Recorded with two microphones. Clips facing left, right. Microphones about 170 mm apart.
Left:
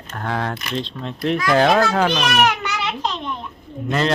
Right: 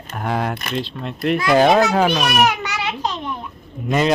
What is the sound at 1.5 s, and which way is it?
A child's voice, 15° right (ahead or behind).